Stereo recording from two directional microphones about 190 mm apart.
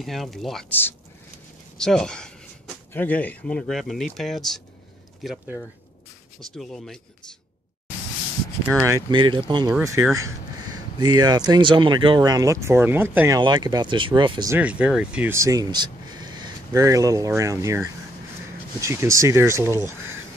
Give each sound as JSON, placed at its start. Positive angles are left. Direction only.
{"t": 0.0, "sound": "speech", "side_deg": 0}
{"t": 8.6, "sound": "speech", "side_deg": -10}
{"t": 9.1, "sound": "speech", "side_deg": -25}
{"t": 11.0, "sound": "speech", "side_deg": -20}
{"t": 13.4, "sound": "speech", "side_deg": -20}
{"t": 14.5, "sound": "speech", "side_deg": -5}